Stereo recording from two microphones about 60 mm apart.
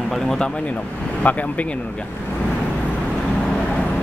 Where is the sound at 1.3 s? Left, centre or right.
Left.